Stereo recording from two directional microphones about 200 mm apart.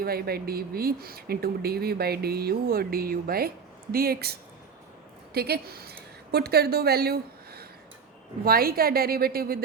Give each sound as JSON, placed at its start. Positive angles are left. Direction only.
{"t": 0.0, "sound": "a woman's voice", "side_deg": -50}